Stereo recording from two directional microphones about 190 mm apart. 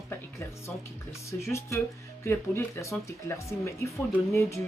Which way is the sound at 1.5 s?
15° left (ahead or behind).